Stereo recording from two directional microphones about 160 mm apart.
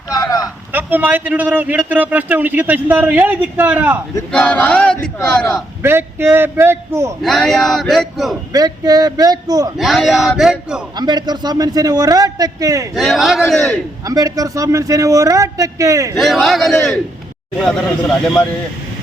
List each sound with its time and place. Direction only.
0.1 s a sound: 25° left (ahead or behind)
0.7 s a man's voice: 10° right (ahead or behind)
4.3 s choir: 5° left (ahead or behind)
5.8 s a man's voice: 15° right (ahead or behind)
7.2 s a man's voice: centre (ahead or behind)
8.5 s speech: 25° right (ahead or behind)
9.7 s a man's voice: centre (ahead or behind)
10.9 s speech: 25° right (ahead or behind)
12.9 s a man's voice: centre (ahead or behind)
14.0 s speech: 20° right (ahead or behind)
16.1 s a man's voice: centre (ahead or behind)